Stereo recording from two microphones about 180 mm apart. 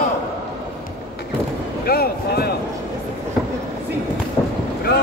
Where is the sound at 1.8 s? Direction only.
60° left (ahead or behind).